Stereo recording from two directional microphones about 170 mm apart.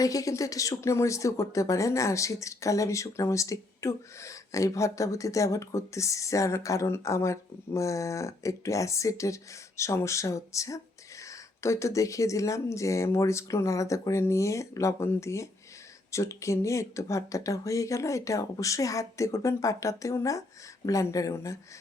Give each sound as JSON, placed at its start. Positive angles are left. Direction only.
{"t": 0.0, "sound": "speech", "side_deg": 20}